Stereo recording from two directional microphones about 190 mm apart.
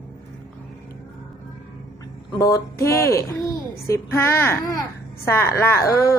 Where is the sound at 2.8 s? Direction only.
15° left (ahead or behind).